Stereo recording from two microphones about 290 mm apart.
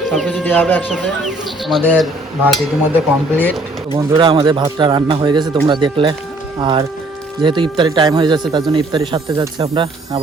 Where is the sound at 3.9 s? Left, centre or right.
Centre.